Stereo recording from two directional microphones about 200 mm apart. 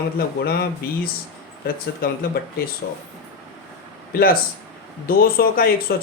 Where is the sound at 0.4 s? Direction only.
50° left (ahead or behind).